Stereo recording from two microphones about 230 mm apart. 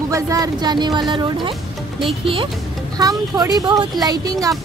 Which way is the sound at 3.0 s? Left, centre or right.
Centre.